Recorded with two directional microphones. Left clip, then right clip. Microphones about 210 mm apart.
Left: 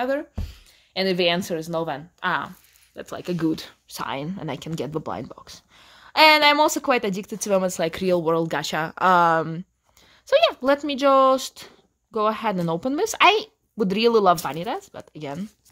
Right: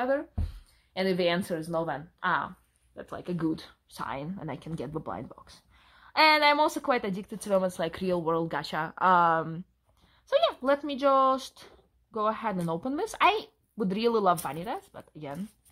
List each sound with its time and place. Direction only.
0.9 s speech: 35° left (ahead or behind)